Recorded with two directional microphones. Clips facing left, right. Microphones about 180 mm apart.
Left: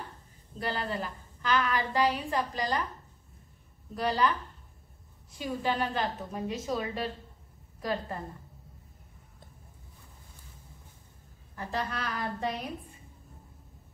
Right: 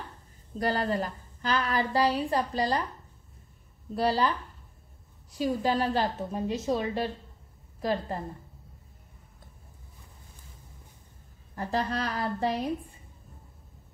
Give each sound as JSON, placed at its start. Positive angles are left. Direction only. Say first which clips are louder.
{"t": 0.6, "sound": "a woman's voice", "louder": "right 5 dB", "side_deg": -40}
{"t": 3.9, "sound": "a woman's voice", "louder": "right 2 dB", "side_deg": -35}
{"t": 5.3, "sound": "a woman's voice", "louder": "right 5 dB", "side_deg": -40}
{"t": 11.5, "sound": "a woman's voice", "louder": "right 5 dB", "side_deg": -35}